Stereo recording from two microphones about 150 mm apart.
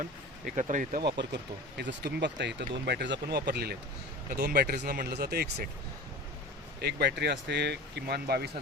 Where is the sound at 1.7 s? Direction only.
90° right.